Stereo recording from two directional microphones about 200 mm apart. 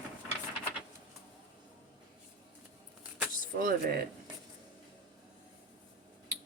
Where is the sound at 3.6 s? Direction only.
45° right (ahead or behind).